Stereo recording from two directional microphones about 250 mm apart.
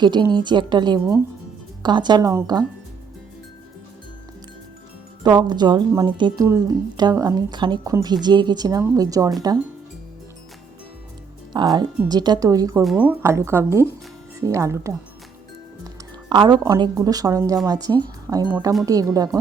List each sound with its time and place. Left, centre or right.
0.0 s a woman's voice: centre
5.2 s a woman's voice: centre
11.5 s a woman's voice: centre
16.3 s a woman's voice: centre
18.9 s a woman's voice: centre